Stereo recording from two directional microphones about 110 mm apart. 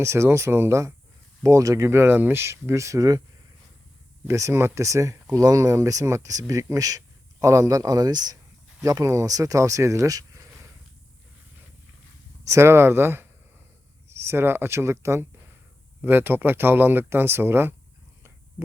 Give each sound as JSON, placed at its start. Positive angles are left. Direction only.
{"t": 0.0, "sound": "speech", "side_deg": -25}
{"t": 4.3, "sound": "speech", "side_deg": -25}
{"t": 12.5, "sound": "speech", "side_deg": -25}
{"t": 14.3, "sound": "speech", "side_deg": -20}